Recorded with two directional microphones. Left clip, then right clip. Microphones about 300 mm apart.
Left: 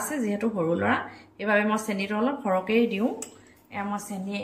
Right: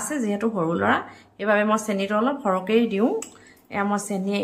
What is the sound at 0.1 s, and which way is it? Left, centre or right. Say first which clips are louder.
A woman's voice: right 6 dB; centre.